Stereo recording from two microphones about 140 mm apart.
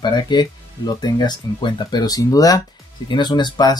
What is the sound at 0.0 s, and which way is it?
Speech, 30° left (ahead or behind).